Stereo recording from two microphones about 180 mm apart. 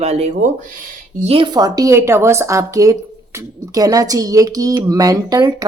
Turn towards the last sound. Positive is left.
turn(degrees=-20)  # may be behind; listen again after turning